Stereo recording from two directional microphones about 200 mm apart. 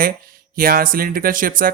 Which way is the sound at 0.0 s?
45° right (ahead or behind).